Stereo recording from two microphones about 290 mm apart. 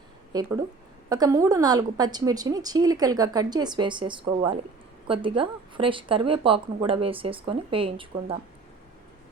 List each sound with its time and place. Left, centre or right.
0.3 s a woman's voice: centre